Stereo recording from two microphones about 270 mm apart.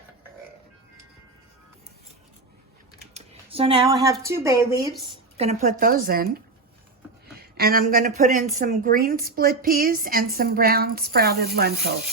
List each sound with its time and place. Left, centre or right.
3.2 s computer keyboard: right
4.0 s a woman's voice: centre
5.1 s a woman's voice: right